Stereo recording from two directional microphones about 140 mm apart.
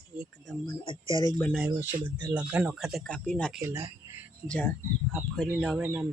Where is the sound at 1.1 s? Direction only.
35° left (ahead or behind).